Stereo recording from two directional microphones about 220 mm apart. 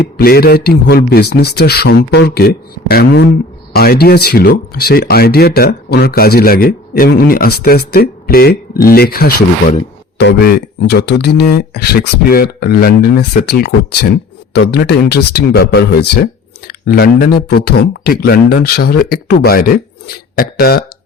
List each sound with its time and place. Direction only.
0.2 s speech: 45° left (ahead or behind)